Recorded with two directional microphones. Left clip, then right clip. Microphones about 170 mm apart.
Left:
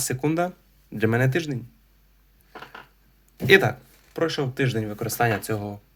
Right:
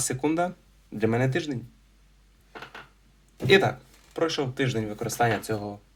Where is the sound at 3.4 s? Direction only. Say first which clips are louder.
Left 3 dB; 45° left (ahead or behind).